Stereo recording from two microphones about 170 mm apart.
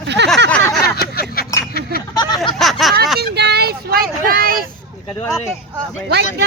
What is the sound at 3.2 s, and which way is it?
Vehicle, 75° right (ahead or behind).